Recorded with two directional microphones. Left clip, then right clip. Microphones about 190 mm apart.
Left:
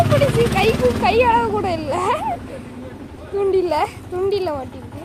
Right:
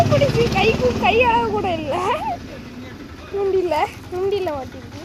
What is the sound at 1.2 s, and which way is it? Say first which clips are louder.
Speech: left 1 dB; 5° left (ahead or behind).